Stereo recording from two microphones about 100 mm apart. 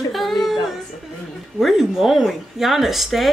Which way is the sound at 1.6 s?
Centre (ahead or behind).